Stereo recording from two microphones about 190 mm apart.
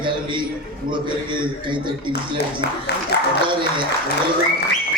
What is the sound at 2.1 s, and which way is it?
Speech, 60° left (ahead or behind).